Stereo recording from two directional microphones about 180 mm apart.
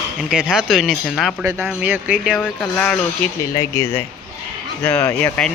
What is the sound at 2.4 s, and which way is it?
Speech, 5° left (ahead or behind).